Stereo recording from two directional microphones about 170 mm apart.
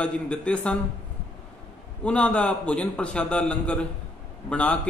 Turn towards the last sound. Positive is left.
turn(degrees=10)  # may be behind; listen again after turning